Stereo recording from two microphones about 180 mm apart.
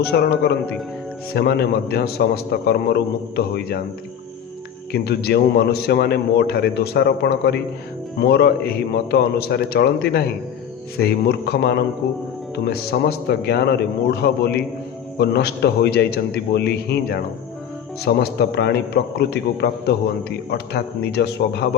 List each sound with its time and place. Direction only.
0.0 s a man's voice: 60° left (ahead or behind)
4.9 s a man's voice: 60° left (ahead or behind)